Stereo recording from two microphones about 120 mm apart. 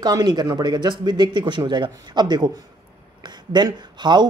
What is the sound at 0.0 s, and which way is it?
Speech, 35° right (ahead or behind).